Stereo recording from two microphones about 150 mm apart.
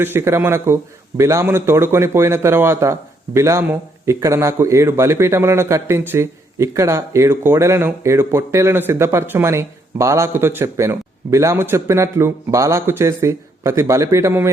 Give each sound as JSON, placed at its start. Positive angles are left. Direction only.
{"t": 0.0, "sound": "a man's voice", "side_deg": -15}